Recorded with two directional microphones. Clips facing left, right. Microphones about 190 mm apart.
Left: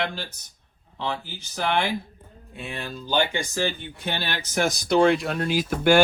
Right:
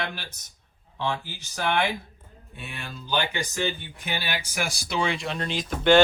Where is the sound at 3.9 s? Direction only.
10° right (ahead or behind).